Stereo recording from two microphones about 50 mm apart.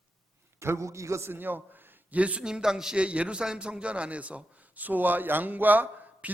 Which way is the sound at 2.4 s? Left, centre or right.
Centre.